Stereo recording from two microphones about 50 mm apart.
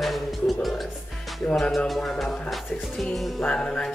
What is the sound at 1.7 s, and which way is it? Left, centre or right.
Music, centre.